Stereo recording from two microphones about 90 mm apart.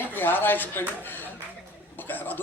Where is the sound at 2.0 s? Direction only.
20° left (ahead or behind).